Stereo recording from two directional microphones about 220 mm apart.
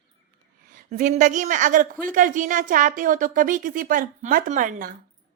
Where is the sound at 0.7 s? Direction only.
35° right (ahead or behind).